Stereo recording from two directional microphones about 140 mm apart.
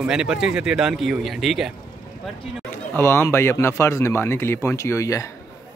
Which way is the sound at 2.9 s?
20° left (ahead or behind).